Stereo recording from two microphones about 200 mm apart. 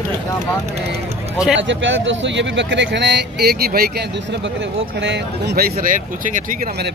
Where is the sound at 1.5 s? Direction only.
70° right (ahead or behind); by 6.5 s 40° right (ahead or behind).